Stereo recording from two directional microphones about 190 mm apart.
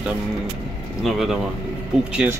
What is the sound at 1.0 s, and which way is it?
Speech, centre (ahead or behind).